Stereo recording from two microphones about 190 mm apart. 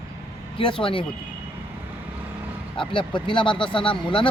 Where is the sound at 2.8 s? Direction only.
25° left (ahead or behind).